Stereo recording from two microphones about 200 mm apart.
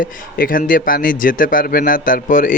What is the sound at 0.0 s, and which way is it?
Speech, 45° left (ahead or behind).